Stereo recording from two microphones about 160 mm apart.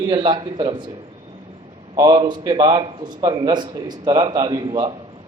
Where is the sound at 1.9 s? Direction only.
30° right (ahead or behind).